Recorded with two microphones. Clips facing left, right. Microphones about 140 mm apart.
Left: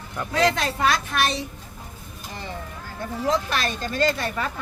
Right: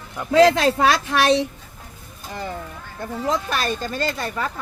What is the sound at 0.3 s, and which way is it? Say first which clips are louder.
A woman's voice: right 8 dB; 90° right.